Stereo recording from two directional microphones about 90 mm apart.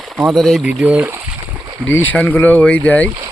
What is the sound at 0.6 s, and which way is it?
Speech, 15° right (ahead or behind).